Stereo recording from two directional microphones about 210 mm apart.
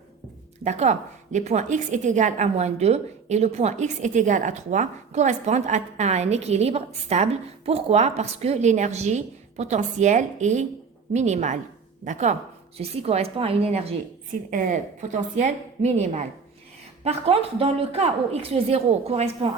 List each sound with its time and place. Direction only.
0.6 s a woman's voice: 35° right (ahead or behind)